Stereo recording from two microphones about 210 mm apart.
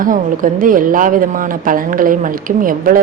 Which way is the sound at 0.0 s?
40° right (ahead or behind).